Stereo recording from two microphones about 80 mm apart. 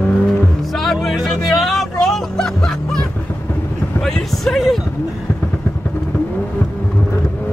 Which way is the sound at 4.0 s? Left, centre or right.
Centre.